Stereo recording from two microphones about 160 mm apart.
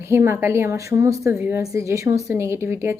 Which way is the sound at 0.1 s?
15° right (ahead or behind).